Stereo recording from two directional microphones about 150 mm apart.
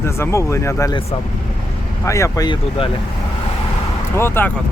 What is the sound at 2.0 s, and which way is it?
Speech, 20° left (ahead or behind).